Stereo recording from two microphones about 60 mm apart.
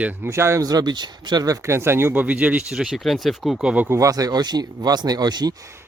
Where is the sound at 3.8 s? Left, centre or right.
Right.